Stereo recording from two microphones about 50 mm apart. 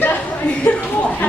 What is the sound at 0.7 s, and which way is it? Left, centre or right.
Music, left.